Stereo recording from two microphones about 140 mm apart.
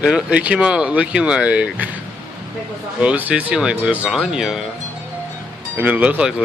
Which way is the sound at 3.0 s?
10° right (ahead or behind).